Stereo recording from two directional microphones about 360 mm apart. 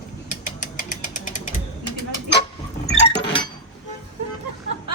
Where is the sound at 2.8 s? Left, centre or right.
Centre.